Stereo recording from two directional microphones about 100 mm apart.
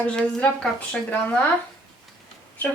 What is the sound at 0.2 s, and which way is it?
Speech, 10° left (ahead or behind).